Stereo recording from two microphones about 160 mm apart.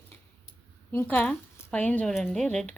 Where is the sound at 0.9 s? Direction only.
10° left (ahead or behind).